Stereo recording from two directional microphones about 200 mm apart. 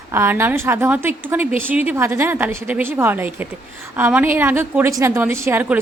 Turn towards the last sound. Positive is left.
turn(degrees=-10)  # may be behind; listen again after turning